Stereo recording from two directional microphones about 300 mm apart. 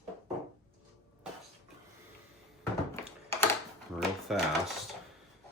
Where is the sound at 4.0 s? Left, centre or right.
Centre.